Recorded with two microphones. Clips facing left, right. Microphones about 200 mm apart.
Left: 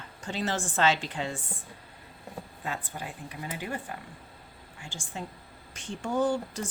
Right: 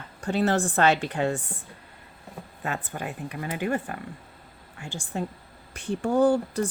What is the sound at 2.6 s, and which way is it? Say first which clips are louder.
Speech: right 6 dB; 65° right (ahead or behind).